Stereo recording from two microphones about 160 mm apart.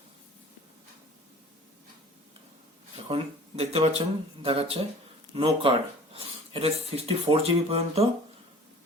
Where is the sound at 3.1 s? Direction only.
40° right (ahead or behind).